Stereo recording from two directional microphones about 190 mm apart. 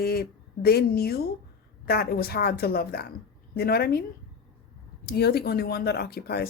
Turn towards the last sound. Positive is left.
turn(degrees=55)  # may be behind; listen again after turning